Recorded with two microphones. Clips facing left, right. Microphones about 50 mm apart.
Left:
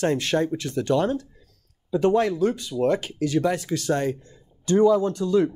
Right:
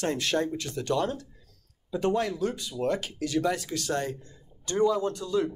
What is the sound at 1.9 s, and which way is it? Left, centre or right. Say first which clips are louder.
Speech: left 7 dB; left.